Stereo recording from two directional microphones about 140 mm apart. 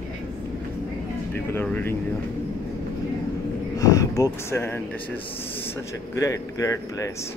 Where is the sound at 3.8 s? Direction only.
25° left (ahead or behind).